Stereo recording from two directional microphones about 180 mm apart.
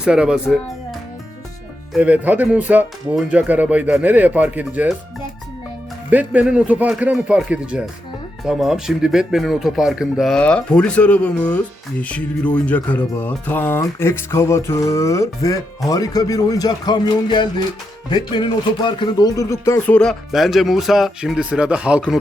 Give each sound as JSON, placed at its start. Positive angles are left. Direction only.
{"t": 0.0, "sound": "speech", "side_deg": -5}
{"t": 6.1, "sound": "speech", "side_deg": -10}
{"t": 20.0, "sound": "speech", "side_deg": 0}